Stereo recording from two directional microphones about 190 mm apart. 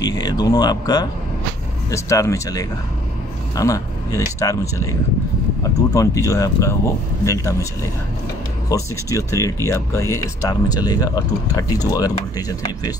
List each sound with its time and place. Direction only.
0.0 s speech: 20° left (ahead or behind)
8.6 s speech: 15° left (ahead or behind)